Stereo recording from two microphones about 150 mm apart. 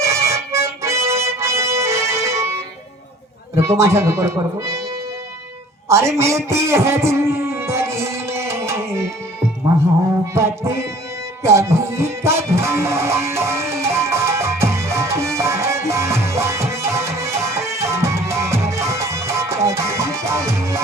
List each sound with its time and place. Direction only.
0.0 s music: 20° right (ahead or behind)
3.5 s speech: 20° right (ahead or behind)
5.9 s music: 20° right (ahead or behind)
10.3 s music: 20° right (ahead or behind)